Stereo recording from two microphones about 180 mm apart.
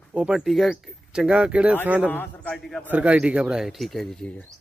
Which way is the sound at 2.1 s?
10° left (ahead or behind).